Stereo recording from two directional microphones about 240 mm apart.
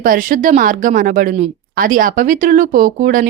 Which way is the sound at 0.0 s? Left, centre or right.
Right.